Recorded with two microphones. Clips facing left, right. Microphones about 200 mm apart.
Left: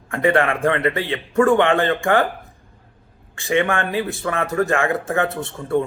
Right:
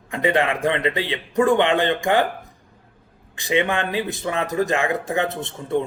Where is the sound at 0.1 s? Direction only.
15° right (ahead or behind).